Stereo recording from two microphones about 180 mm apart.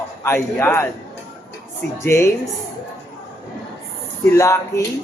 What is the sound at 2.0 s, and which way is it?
Speech, 15° left (ahead or behind).